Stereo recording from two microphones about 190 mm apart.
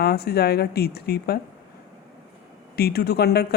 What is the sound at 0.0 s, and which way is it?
Speech, 55° left (ahead or behind).